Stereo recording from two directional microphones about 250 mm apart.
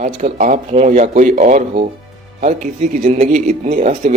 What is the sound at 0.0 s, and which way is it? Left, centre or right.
A man's voice, right.